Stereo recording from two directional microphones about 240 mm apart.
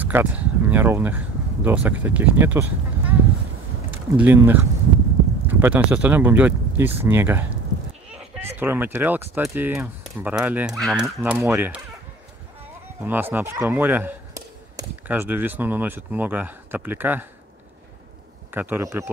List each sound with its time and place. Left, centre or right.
0.0 s speech: centre
13.0 s speech: centre
18.5 s speech: centre